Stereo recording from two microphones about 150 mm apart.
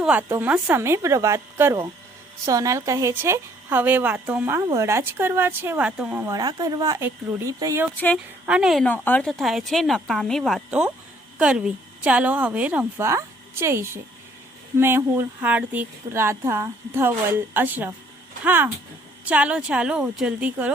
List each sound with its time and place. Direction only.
0.0 s a woman's voice: 10° right (ahead or behind)
6.2 s speech: 25° right (ahead or behind)
7.9 s speech: 10° left (ahead or behind)
8.4 s a woman's voice: 5° right (ahead or behind)
8.8 s a woman's voice: 10° left (ahead or behind); by 20.7 s 10° right (ahead or behind)